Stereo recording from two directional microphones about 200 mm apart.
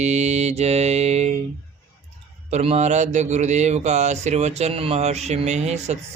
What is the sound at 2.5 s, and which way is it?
Mantra, 30° right (ahead or behind).